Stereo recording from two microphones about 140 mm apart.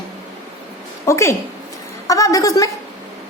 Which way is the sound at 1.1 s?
20° left (ahead or behind).